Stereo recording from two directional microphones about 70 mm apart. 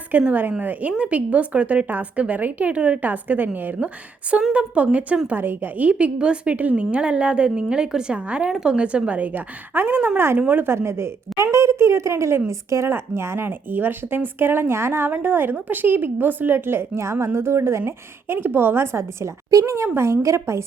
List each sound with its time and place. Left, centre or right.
0.1 s a woman's voice: right